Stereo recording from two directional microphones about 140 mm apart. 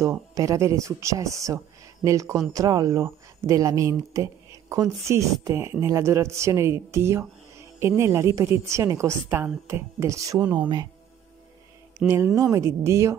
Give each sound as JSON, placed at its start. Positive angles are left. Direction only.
{"t": 0.0, "sound": "speech", "side_deg": -25}
{"t": 12.4, "sound": "speech", "side_deg": -20}